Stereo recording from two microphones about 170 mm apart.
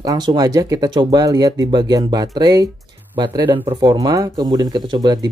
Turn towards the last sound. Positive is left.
turn(degrees=-25)  # may be behind; listen again after turning